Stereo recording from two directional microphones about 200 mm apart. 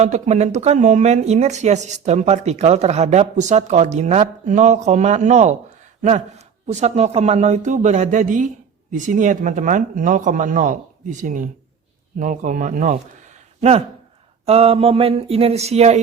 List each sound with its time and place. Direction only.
0.0 s speech: 35° right (ahead or behind)